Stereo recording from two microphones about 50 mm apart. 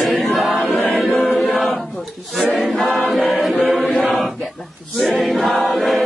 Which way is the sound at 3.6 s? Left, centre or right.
Centre.